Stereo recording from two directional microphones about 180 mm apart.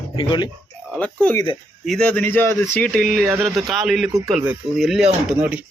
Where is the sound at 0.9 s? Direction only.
5° left (ahead or behind); by 5.6 s 10° right (ahead or behind).